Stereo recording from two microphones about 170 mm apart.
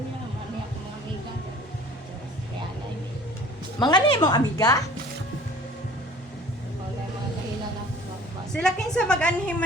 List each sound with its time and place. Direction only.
3.8 s a woman's voice: 25° left (ahead or behind)
8.5 s a woman's voice: 5° left (ahead or behind)